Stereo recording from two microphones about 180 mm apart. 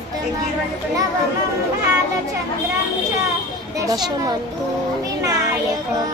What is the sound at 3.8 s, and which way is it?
Child singing, 20° right (ahead or behind).